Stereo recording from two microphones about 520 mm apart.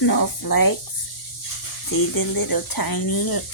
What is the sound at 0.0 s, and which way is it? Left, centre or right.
Speech, left.